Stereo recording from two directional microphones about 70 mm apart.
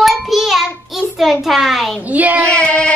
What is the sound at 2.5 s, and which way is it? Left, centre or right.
Speech, centre.